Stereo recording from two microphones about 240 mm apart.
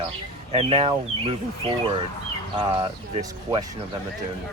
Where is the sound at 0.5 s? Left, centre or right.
Right.